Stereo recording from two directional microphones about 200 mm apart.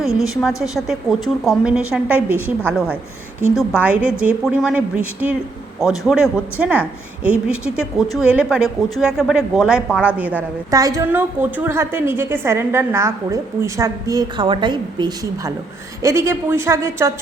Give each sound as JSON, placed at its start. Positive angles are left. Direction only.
{"t": 0.0, "sound": "a woman's voice", "side_deg": 0}
{"t": 10.7, "sound": "a woman's voice", "side_deg": -15}